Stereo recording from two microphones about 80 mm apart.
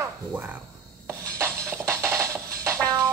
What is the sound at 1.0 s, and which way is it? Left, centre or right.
Music, right.